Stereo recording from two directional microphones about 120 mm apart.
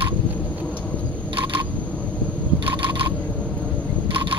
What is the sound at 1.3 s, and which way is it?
Camera, 45° right (ahead or behind).